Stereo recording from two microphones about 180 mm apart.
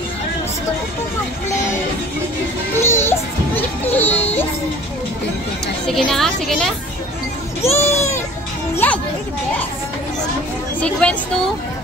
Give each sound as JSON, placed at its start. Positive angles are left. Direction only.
{"t": 2.8, "sound": "speech", "side_deg": 15}
{"t": 5.9, "sound": "a woman's voice", "side_deg": 5}
{"t": 7.7, "sound": "speech", "side_deg": 15}
{"t": 10.8, "sound": "a woman's voice", "side_deg": 5}